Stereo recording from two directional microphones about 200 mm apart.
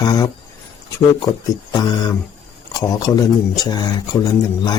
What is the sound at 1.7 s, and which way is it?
Speech, 20° left (ahead or behind).